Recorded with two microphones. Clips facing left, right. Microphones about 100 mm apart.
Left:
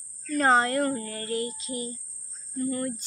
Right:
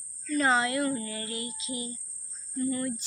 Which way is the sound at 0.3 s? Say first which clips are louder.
Left 3 dB; 45° left (ahead or behind).